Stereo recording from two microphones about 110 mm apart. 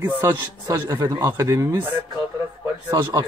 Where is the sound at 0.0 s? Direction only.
25° right (ahead or behind).